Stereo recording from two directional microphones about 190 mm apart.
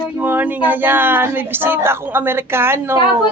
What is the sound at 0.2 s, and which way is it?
Speech, 10° right (ahead or behind).